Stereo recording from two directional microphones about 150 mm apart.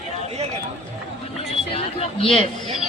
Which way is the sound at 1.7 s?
40° left (ahead or behind).